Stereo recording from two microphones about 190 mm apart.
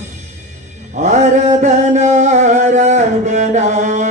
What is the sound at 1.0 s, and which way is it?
Music, 40° right (ahead or behind).